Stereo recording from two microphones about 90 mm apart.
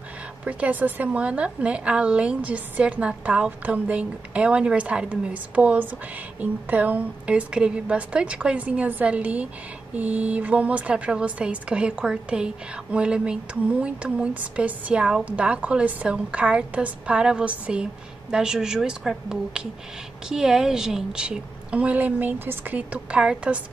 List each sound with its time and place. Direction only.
0.5 s speech: 15° right (ahead or behind)